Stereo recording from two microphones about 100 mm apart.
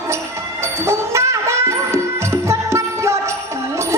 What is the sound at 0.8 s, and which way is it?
Music, 30° right (ahead or behind).